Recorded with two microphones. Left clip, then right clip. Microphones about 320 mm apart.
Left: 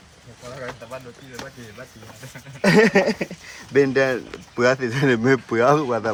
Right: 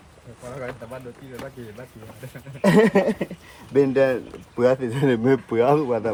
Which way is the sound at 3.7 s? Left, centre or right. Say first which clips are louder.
Even; centre.